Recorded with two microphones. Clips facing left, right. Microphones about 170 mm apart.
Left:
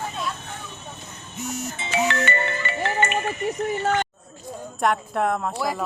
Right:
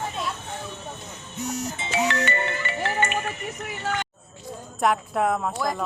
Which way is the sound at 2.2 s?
70° left (ahead or behind).